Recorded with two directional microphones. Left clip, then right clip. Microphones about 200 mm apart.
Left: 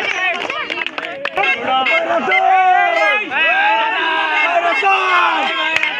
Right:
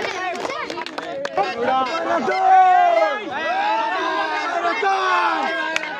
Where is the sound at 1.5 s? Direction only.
10° right (ahead or behind).